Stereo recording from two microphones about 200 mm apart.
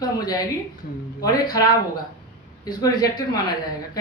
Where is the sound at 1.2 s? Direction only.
20° left (ahead or behind).